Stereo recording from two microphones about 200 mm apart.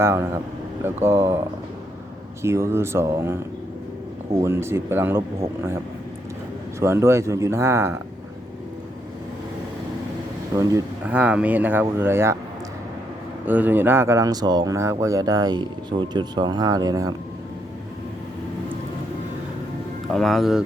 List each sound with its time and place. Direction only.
0.0 s speech: 15° right (ahead or behind)
2.4 s speech: 15° right (ahead or behind)
6.7 s speech: 15° right (ahead or behind)
10.6 s speech: 15° right (ahead or behind)
13.5 s speech: 10° right (ahead or behind)
20.1 s speech: centre (ahead or behind)